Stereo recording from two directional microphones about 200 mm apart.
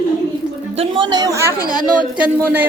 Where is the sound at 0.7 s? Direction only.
30° right (ahead or behind).